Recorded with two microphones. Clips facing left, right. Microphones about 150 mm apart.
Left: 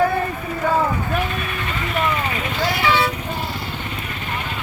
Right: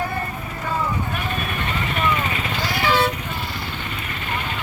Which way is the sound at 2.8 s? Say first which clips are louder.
Right 1 dB; 40° right (ahead or behind).